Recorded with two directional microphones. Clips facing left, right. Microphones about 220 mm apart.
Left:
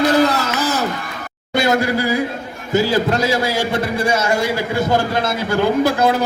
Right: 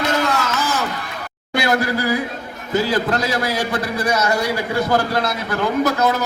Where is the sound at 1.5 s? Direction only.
25° left (ahead or behind).